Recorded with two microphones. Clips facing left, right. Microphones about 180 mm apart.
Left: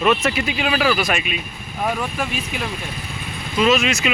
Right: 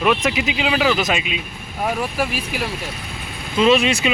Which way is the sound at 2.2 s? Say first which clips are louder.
Right 2 dB; 5° right (ahead or behind).